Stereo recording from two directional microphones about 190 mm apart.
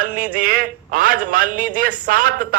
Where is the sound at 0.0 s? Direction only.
45° right (ahead or behind).